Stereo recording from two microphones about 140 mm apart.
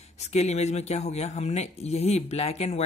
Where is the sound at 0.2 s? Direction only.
50° left (ahead or behind).